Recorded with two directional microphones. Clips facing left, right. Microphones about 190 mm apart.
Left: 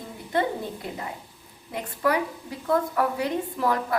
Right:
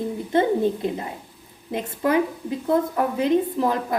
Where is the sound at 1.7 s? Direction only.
20° right (ahead or behind).